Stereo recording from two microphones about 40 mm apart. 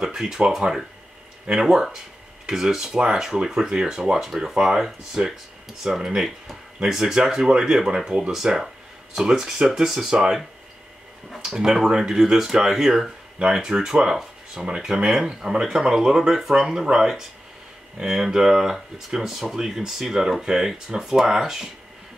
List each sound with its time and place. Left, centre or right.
0.0 s speech: centre
8.3 s speech: centre
11.2 s speech: centre
11.5 s speech: centre